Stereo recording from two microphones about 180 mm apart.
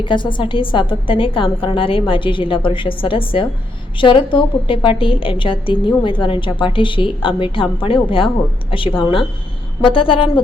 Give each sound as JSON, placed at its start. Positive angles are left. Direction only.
{"t": 0.0, "sound": "a woman's voice", "side_deg": 25}